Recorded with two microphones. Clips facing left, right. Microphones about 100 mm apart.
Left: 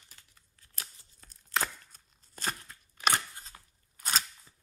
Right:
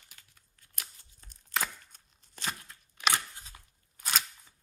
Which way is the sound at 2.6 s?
40° left (ahead or behind).